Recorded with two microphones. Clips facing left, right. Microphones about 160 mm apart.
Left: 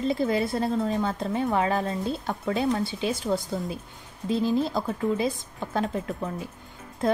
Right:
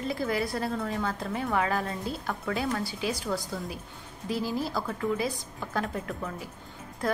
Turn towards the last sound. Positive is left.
turn(degrees=25)  # may be behind; listen again after turning